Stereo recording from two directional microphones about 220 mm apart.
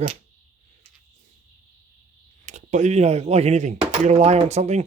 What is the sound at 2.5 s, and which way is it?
Speech, 35° right (ahead or behind).